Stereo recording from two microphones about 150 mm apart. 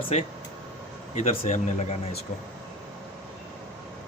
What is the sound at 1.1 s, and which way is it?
Speech, 50° left (ahead or behind).